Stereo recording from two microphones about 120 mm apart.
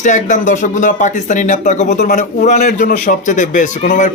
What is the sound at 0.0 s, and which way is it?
Speech, 90° left.